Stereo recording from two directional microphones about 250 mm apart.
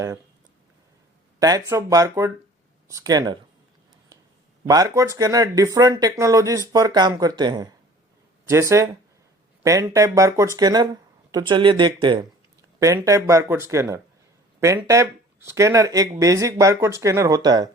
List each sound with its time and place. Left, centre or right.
1.4 s speech: centre
4.6 s speech: centre